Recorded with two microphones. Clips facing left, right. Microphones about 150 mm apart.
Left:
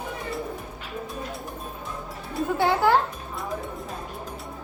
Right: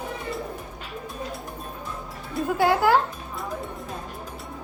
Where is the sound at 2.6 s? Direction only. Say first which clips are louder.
Right 1 dB; 10° right (ahead or behind).